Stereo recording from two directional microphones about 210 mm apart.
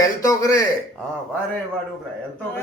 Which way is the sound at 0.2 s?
15° left (ahead or behind).